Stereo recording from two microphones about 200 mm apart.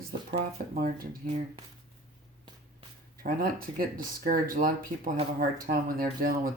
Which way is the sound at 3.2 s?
45° right (ahead or behind).